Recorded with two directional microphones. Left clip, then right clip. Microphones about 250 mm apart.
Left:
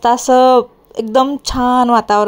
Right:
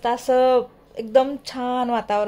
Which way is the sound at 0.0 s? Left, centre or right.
Left.